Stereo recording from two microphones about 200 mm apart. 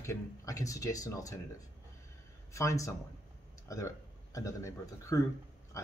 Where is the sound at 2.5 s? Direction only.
15° left (ahead or behind).